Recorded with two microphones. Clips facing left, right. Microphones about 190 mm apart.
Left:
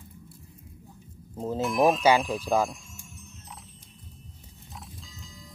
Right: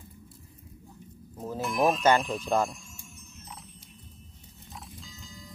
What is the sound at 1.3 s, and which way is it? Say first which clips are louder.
Speech: left 5 dB; 25° left (ahead or behind).